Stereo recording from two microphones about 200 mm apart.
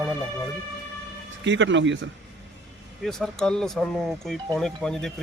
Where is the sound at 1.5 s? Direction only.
65° right (ahead or behind).